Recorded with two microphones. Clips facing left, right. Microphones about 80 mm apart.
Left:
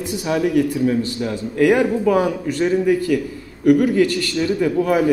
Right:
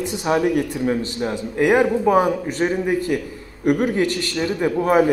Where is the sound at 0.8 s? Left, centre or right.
Right.